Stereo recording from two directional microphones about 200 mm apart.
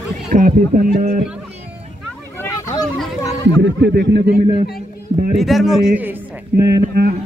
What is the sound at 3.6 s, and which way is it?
Speech, 60° right (ahead or behind).